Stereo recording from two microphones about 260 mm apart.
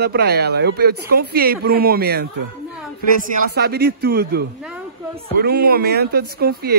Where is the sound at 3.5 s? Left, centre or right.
Right.